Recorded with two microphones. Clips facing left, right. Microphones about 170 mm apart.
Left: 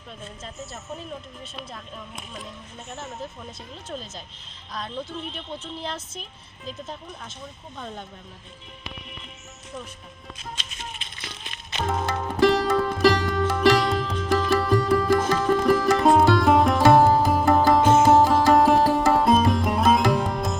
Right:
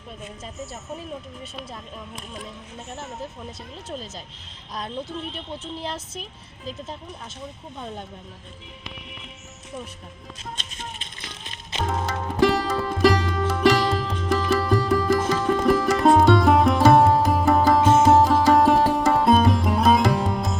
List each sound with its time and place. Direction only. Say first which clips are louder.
11.9 s music: left 2 dB; centre (ahead or behind)